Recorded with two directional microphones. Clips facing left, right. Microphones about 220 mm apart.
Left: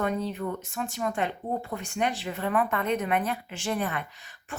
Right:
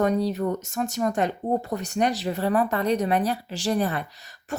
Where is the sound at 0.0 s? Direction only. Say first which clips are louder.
Right 6 dB; 40° right (ahead or behind).